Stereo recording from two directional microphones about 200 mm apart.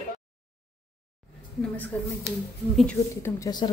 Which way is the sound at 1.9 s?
5° left (ahead or behind).